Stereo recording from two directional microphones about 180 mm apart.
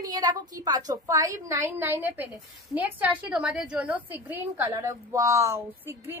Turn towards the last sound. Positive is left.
turn(degrees=-10)  # may be behind; listen again after turning